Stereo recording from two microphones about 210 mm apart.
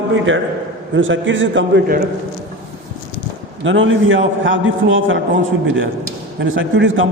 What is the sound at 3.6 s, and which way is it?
A man's voice, 65° right (ahead or behind).